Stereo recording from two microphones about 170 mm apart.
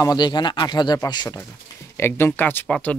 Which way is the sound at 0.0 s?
25° left (ahead or behind).